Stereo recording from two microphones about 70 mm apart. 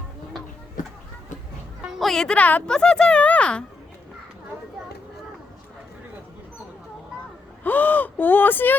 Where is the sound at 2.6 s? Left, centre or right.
Centre.